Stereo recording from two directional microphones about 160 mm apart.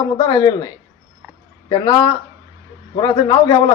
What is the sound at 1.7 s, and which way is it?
A man's voice, 25° left (ahead or behind).